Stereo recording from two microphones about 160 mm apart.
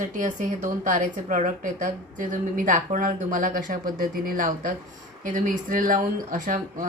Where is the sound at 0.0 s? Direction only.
55° right (ahead or behind).